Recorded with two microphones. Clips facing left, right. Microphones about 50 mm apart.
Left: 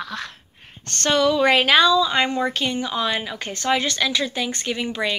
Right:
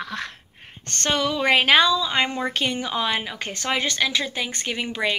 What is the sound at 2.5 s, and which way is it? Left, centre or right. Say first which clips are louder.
A woman's voice: left 1 dB; right.